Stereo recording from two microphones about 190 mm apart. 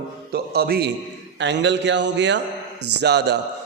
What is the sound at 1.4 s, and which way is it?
A man's voice, 65° right (ahead or behind).